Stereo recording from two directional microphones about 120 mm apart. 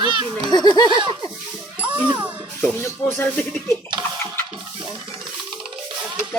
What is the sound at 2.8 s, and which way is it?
Music, 20° left (ahead or behind).